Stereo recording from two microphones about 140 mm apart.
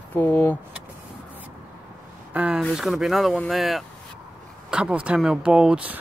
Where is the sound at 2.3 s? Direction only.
5° right (ahead or behind).